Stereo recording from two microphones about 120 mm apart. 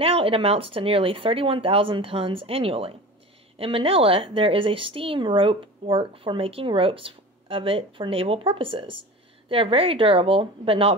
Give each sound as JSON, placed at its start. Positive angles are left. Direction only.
{"t": 0.0, "sound": "speech", "side_deg": -50}